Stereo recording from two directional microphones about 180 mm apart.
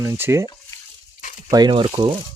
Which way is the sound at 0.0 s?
15° right (ahead or behind).